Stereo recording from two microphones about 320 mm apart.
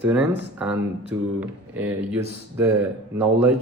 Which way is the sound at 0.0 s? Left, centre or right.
Centre.